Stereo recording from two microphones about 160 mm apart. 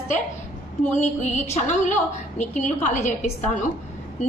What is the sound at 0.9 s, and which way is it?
A woman's voice, 45° left (ahead or behind).